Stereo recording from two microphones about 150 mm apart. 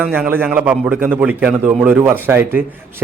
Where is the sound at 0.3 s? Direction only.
15° right (ahead or behind).